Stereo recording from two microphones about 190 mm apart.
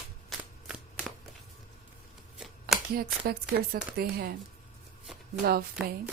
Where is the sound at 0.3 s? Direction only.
Centre (ahead or behind).